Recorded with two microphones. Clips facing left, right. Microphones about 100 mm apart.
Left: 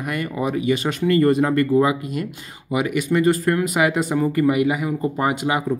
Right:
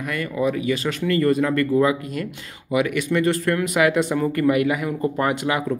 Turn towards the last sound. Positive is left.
turn(degrees=15)  # may be behind; listen again after turning